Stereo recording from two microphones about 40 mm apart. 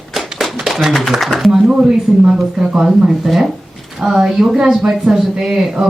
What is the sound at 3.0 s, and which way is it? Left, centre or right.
Speech, centre.